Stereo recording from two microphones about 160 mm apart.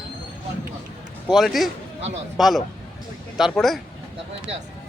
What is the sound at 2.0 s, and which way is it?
Speech, 45° right (ahead or behind).